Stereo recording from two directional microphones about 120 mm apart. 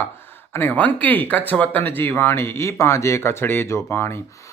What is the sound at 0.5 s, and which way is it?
Speech, 15° left (ahead or behind).